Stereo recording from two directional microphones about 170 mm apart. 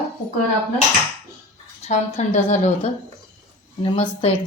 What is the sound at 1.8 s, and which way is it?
A woman's voice, 40° left (ahead or behind).